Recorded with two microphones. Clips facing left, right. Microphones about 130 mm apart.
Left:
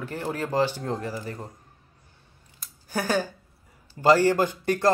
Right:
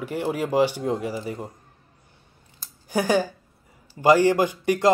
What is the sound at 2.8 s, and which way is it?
Speech, 15° right (ahead or behind).